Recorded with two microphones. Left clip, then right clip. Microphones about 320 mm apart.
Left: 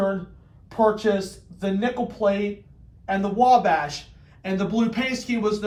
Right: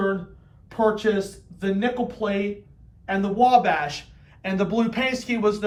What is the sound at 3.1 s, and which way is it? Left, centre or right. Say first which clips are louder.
Speech: even; centre.